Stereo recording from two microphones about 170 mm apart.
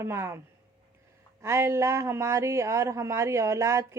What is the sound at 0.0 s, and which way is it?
Speech, 15° right (ahead or behind).